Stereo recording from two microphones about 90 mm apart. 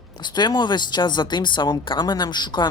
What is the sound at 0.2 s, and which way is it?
A woman's voice, 55° left (ahead or behind).